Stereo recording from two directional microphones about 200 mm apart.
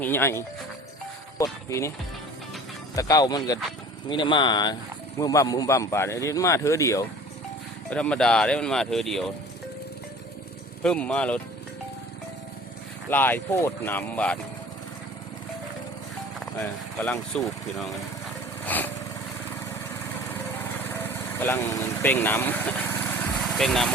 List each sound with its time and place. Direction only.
0.0 s speech: 10° left (ahead or behind)
2.9 s speech: 15° left (ahead or behind); by 9.3 s centre (ahead or behind)
10.8 s speech: 5° left (ahead or behind)
13.1 s speech: 10° left (ahead or behind)
16.6 s speech: 5° left (ahead or behind)
18.6 s lawn mower: 10° left (ahead or behind)
20.9 s vehicle: 10° left (ahead or behind)
23.6 s speech: centre (ahead or behind)